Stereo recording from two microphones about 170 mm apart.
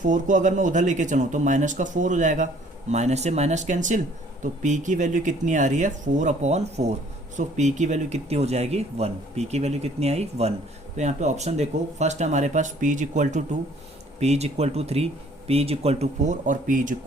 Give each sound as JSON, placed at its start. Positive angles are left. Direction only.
{"t": 0.0, "sound": "speech", "side_deg": -50}